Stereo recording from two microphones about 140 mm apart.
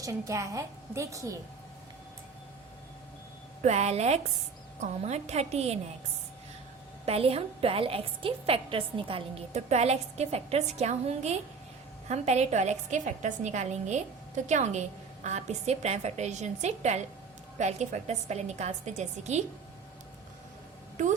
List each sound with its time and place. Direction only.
0.0 s a woman's voice: 25° right (ahead or behind)
3.6 s a woman's voice: 50° right (ahead or behind)
7.0 s a woman's voice: 45° right (ahead or behind)